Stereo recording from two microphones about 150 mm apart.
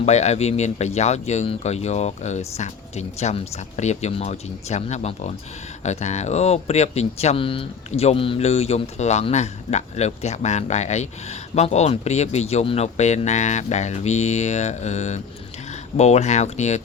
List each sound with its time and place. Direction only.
0.0 s speech: 50° left (ahead or behind)